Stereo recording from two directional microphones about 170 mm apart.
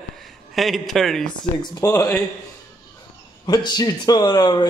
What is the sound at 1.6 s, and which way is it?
Speech, 20° left (ahead or behind).